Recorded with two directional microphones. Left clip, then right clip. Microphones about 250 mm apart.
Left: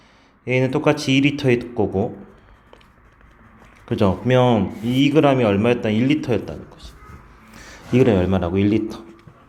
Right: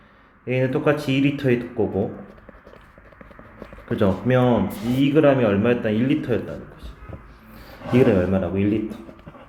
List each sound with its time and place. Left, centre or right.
0.4 s a man's voice: left
3.8 s a man's voice: left
7.5 s speech: centre